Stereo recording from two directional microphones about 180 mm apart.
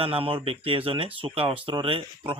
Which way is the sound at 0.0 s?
30° right (ahead or behind).